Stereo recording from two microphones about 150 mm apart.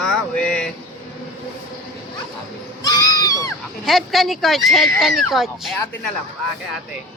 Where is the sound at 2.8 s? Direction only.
25° left (ahead or behind).